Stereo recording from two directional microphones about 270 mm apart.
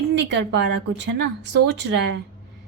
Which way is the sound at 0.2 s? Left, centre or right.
Right.